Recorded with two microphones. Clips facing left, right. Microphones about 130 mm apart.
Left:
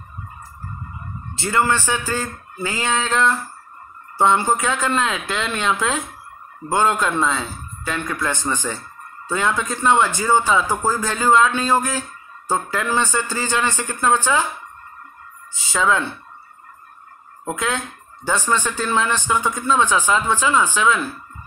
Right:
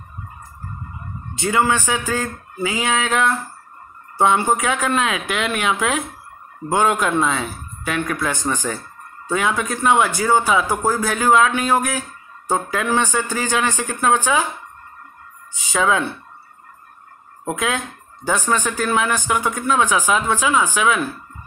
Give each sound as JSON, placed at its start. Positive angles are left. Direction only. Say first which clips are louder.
{"t": 1.3, "sound": "a man's voice", "louder": "right 1 dB", "side_deg": -15}
{"t": 15.5, "sound": "a man's voice", "louder": "right 1 dB", "side_deg": -15}
{"t": 17.5, "sound": "a man's voice", "louder": "right 1 dB", "side_deg": -10}